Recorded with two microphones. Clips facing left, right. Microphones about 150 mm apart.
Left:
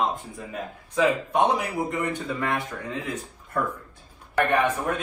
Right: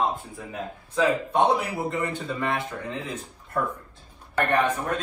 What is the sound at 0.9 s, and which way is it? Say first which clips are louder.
Speech: left 1 dB; 15° left (ahead or behind).